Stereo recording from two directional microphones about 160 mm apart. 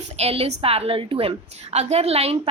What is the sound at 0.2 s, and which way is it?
A woman's voice, 40° right (ahead or behind).